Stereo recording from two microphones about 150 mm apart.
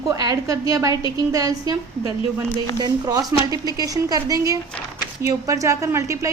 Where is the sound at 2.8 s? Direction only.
25° right (ahead or behind).